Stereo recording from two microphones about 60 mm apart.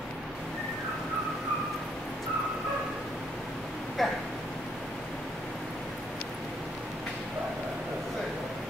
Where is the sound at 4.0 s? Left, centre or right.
Centre.